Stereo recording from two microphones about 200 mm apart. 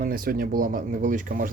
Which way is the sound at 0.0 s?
45° right (ahead or behind).